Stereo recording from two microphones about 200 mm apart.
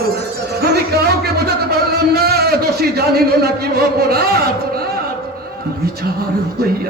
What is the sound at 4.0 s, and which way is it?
Speech, 50° right (ahead or behind).